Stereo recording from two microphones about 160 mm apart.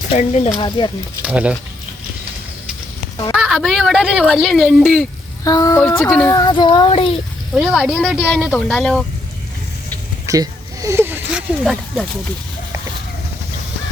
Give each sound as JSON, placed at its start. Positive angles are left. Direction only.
{"t": 0.1, "sound": "speech", "side_deg": 45}
{"t": 1.2, "sound": "speech", "side_deg": -5}
{"t": 3.3, "sound": "speech", "side_deg": -5}
{"t": 5.5, "sound": "speech", "side_deg": 20}
{"t": 6.3, "sound": "child singing", "side_deg": 25}
{"t": 7.5, "sound": "speech", "side_deg": -5}
{"t": 10.2, "sound": "a sound", "side_deg": -20}